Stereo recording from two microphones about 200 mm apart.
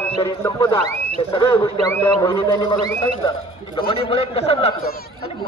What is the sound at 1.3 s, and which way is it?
A man's voice, 15° left (ahead or behind).